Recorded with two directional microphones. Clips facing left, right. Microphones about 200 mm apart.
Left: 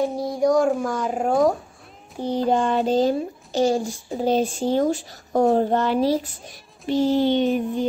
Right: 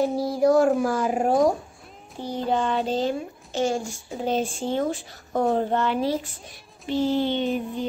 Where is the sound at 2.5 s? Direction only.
45° left (ahead or behind).